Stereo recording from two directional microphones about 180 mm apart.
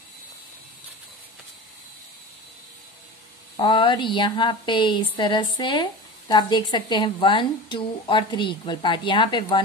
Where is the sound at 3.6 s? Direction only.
25° left (ahead or behind).